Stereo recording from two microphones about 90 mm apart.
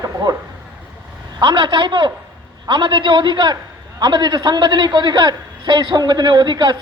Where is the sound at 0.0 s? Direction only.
45° right (ahead or behind).